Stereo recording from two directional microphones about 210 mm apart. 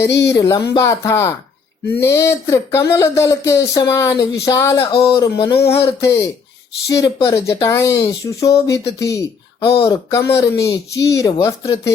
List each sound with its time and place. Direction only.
0.0 s speech: 55° left (ahead or behind)
0.3 s speech: 15° left (ahead or behind)